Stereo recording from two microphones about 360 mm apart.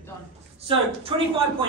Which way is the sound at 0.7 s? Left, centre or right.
Centre.